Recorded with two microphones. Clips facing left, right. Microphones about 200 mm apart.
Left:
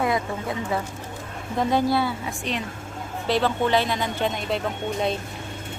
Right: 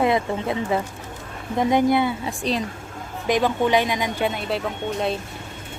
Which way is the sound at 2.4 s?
35° right (ahead or behind).